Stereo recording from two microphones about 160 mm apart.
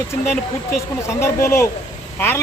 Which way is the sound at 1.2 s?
15° left (ahead or behind).